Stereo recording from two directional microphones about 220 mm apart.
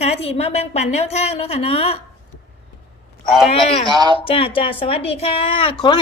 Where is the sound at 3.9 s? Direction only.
20° right (ahead or behind).